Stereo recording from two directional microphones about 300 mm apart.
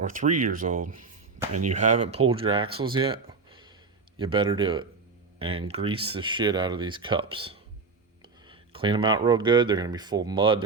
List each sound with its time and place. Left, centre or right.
0.0 s speech: right